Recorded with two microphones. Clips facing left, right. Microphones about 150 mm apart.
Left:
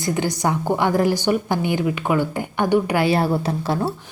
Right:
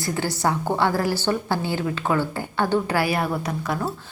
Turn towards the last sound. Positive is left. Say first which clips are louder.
# left 4 dB
turn(degrees=30)  # may be behind; listen again after turning